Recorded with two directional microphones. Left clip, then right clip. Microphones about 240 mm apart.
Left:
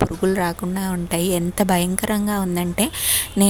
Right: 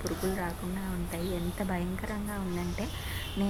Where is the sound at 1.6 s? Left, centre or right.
Left.